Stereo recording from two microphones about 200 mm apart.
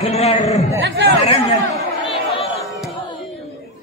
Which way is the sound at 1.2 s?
35° left (ahead or behind).